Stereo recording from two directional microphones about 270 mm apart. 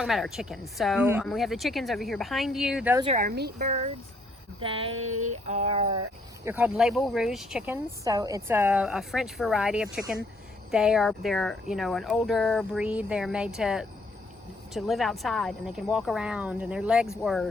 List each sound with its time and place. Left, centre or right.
0.0 s speech: centre
3.0 s speech: right
3.2 s speech: right; by 4.9 s centre
4.9 s a sound: right
6.4 s speech: centre